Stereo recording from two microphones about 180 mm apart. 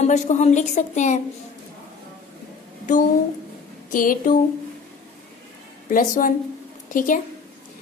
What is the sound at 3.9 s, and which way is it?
Speech, 50° left (ahead or behind).